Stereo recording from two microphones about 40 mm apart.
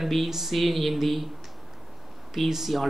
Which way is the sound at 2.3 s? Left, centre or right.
Centre.